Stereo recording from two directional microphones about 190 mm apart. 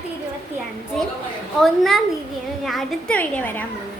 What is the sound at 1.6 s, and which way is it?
A woman's voice, centre (ahead or behind).